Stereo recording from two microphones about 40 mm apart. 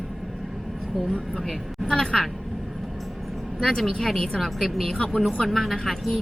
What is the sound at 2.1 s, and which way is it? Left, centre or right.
Speech, centre.